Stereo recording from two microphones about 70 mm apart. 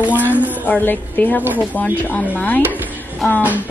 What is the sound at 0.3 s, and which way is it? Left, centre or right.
A woman's voice, left.